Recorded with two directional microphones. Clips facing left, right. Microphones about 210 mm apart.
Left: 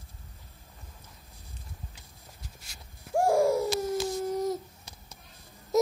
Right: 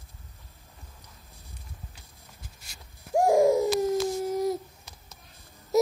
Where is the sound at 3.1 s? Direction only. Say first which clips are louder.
Right 3 dB; 20° right (ahead or behind).